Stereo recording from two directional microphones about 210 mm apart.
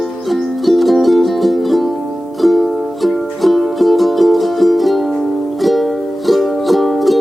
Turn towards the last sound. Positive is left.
turn(degrees=0)  # may be behind; listen again after turning